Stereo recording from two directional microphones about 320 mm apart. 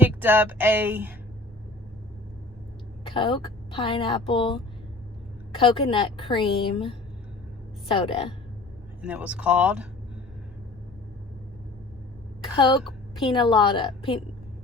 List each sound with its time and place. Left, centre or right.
0.0 s speech: centre
3.0 s a woman's voice: centre
9.0 s speech: centre
12.5 s a woman's voice: centre